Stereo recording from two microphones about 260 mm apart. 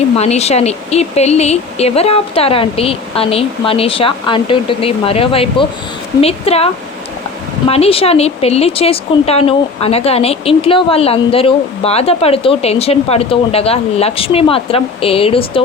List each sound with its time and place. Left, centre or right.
0.2 s speech: left
7.7 s speech: left